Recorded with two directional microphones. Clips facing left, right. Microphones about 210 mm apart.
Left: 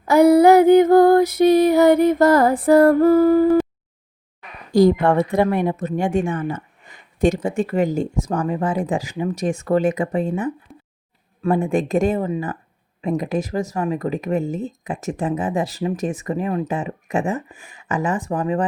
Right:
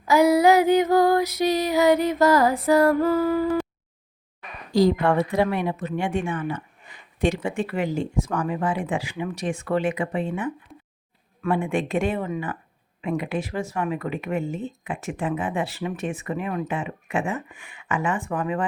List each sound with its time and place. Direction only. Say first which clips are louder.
0.0 s female singing: left 5 dB; 55° left (ahead or behind)
4.7 s speech: left 5 dB; 50° left (ahead or behind)
10.7 s a sound: left 2 dB; centre (ahead or behind)
11.4 s speech: left 5 dB; 40° left (ahead or behind)